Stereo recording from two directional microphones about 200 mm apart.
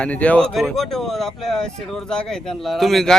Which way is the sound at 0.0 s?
5° left (ahead or behind).